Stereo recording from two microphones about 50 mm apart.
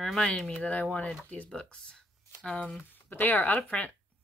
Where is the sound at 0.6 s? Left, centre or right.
Left.